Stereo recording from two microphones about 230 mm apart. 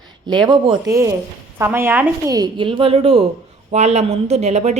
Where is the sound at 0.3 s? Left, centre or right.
Centre.